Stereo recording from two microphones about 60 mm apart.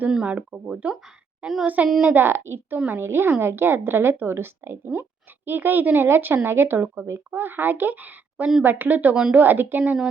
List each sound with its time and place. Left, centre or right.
0.1 s a woman's voice: centre; by 10.0 s right